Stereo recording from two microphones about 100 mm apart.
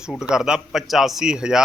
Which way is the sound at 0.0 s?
5° right (ahead or behind).